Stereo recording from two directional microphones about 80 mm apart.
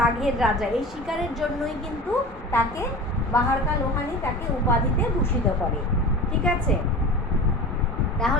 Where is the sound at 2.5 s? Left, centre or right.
Left.